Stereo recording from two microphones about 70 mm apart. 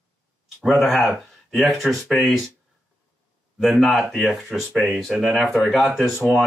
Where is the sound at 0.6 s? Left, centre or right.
Centre.